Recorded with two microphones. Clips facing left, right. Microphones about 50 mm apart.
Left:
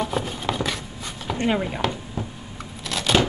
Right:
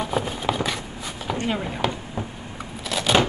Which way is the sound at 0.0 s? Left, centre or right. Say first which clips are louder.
Right 1 dB; centre.